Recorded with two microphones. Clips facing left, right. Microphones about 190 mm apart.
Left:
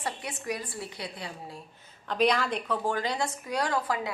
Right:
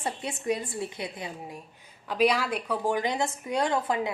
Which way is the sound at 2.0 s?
5° right (ahead or behind).